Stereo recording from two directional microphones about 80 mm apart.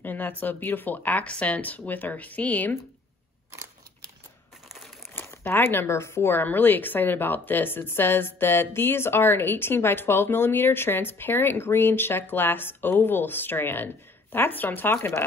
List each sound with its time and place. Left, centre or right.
0.0 s speech: left
5.1 s speech: left